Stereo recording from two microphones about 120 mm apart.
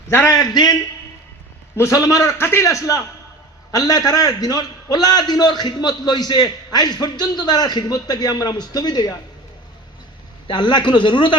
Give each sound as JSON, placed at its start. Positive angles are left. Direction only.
{"t": 0.1, "sound": "a man's voice", "side_deg": 20}
{"t": 10.4, "sound": "a man's voice", "side_deg": 40}